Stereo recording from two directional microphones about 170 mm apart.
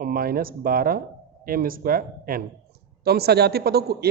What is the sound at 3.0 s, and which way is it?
Speech, 70° right (ahead or behind).